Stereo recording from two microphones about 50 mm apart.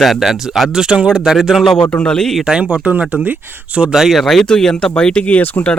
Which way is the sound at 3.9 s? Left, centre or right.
Centre.